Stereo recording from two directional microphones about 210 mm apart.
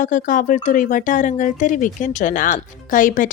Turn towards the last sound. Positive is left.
turn(degrees=40)  # may be behind; listen again after turning